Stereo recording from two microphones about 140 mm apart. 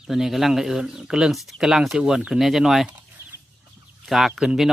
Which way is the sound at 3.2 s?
25° left (ahead or behind).